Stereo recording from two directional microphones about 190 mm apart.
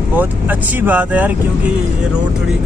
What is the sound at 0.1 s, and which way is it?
Speech, 10° right (ahead or behind).